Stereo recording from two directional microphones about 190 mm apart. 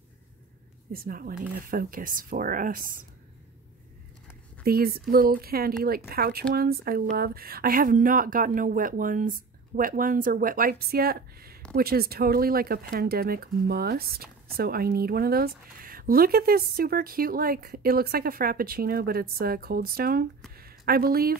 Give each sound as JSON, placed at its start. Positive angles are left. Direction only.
{"t": 0.9, "sound": "speech", "side_deg": -50}
{"t": 4.6, "sound": "speech", "side_deg": -55}
{"t": 20.5, "sound": "a sound", "side_deg": -50}